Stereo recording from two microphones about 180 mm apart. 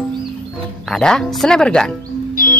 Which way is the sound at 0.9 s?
5° left (ahead or behind).